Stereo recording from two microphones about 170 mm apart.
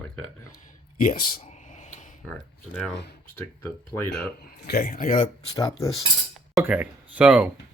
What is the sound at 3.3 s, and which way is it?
Speech, 15° left (ahead or behind).